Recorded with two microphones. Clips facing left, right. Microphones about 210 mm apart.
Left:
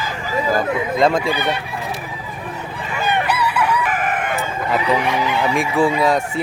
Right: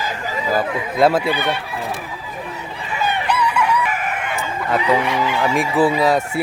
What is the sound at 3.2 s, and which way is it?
Chicken, 5° left (ahead or behind).